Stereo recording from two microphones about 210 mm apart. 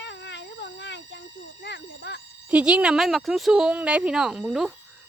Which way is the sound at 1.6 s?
60° left (ahead or behind).